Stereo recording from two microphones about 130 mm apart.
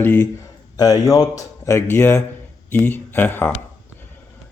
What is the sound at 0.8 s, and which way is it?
A man's voice, 25° left (ahead or behind).